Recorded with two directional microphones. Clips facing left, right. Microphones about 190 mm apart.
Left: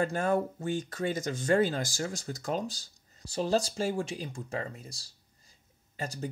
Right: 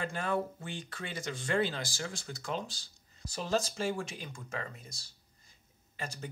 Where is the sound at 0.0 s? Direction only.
45° left (ahead or behind).